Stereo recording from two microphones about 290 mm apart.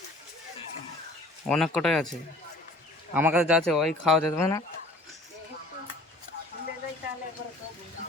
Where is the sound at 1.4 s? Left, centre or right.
Centre.